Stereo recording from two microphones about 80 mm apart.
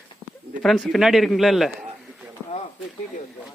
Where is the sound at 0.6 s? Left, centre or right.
Centre.